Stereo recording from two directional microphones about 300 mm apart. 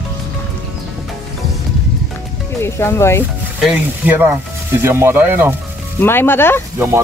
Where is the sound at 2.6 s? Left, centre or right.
Centre.